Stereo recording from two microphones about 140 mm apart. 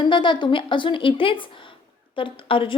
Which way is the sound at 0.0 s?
35° left (ahead or behind).